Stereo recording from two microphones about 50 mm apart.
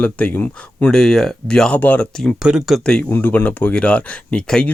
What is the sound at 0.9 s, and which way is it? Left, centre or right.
Speech, centre.